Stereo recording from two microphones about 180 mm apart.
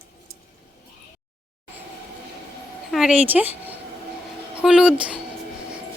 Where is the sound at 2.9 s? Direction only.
5° right (ahead or behind).